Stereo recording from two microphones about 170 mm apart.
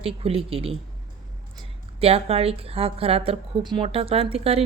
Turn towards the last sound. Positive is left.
turn(degrees=-35)  # may be behind; listen again after turning